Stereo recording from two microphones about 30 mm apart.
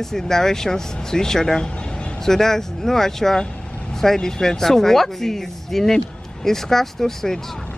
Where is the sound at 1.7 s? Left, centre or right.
Left.